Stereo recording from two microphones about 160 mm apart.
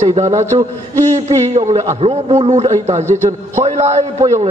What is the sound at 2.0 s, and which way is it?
A man's voice, 40° right (ahead or behind).